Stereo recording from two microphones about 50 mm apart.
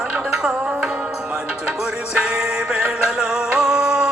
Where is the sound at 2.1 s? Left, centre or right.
Centre.